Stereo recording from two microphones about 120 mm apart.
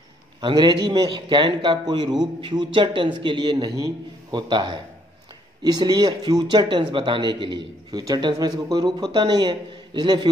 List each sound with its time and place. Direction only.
0.4 s a man's voice: 40° right (ahead or behind)